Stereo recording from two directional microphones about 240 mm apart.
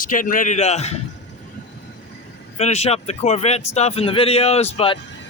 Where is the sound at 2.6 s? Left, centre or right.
Left.